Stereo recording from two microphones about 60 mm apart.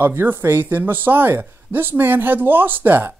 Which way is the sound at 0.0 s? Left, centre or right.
Right.